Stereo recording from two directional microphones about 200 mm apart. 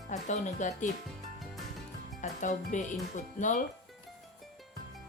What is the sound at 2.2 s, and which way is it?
Speech, 40° left (ahead or behind).